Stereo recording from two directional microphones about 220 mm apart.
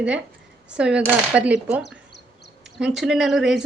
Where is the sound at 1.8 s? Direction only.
50° left (ahead or behind).